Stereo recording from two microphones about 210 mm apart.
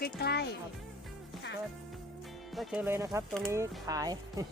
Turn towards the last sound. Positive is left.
turn(degrees=-15)  # may be behind; listen again after turning